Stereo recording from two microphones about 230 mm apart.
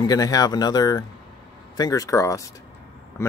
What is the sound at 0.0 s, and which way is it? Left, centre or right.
Speech, centre.